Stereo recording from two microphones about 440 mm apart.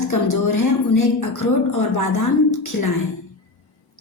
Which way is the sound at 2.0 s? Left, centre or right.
Left.